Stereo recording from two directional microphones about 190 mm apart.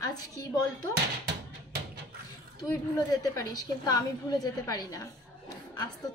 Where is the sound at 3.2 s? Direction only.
20° left (ahead or behind).